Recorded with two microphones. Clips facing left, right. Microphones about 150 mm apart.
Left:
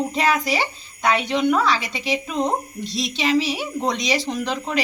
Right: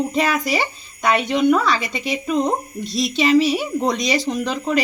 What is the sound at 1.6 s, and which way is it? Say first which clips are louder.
A woman's voice: right 1 dB; 50° right (ahead or behind).